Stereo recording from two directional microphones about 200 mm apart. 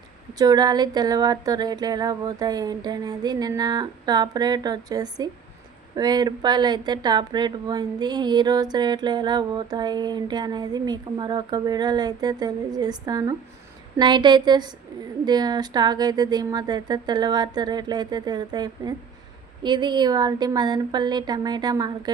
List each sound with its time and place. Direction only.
0.3 s speech: 20° right (ahead or behind)